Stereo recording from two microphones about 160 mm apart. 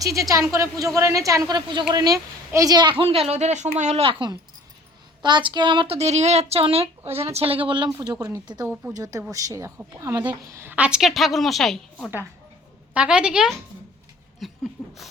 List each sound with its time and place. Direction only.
0.0 s speech: 20° right (ahead or behind)
6.0 s a woman's voice: 45° right (ahead or behind); by 14.6 s centre (ahead or behind)
14.8 s a sound: 20° left (ahead or behind)